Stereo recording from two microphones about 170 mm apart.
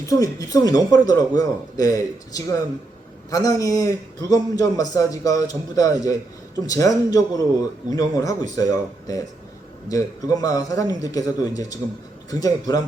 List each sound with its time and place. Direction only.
0.0 s a man's voice: 20° left (ahead or behind)